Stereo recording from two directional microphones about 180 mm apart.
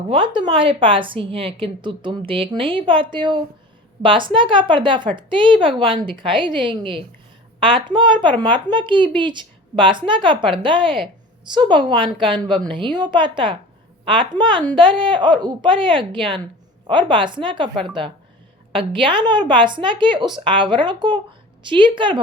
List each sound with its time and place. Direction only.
0.1 s a woman's voice: 25° right (ahead or behind)